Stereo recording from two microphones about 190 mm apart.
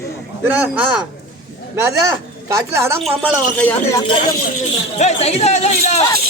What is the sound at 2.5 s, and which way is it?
Speech, 15° right (ahead or behind).